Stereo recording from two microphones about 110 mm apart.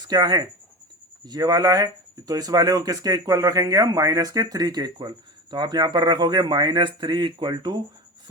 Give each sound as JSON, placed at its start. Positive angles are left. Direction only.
{"t": 0.1, "sound": "speech", "side_deg": -40}